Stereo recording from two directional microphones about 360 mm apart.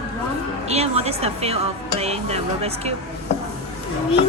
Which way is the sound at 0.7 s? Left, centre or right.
Centre.